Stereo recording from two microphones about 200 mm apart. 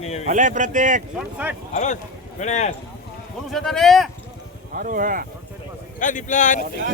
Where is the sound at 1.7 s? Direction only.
40° left (ahead or behind).